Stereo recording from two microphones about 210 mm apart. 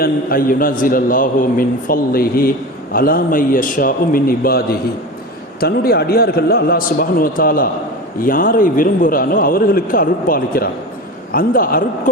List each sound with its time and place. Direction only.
0.0 s a man's voice: 45° left (ahead or behind)